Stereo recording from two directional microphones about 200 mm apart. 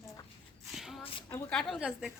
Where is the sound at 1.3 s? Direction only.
5° left (ahead or behind).